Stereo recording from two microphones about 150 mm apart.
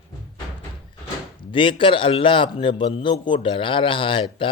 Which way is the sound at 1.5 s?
35° left (ahead or behind).